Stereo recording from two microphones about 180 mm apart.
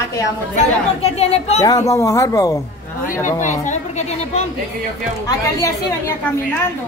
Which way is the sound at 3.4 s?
45° left (ahead or behind).